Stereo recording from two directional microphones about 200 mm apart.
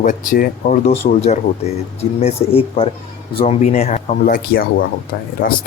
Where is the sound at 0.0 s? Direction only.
40° left (ahead or behind).